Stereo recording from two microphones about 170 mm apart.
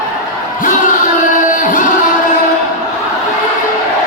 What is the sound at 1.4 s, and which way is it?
Music, 50° left (ahead or behind).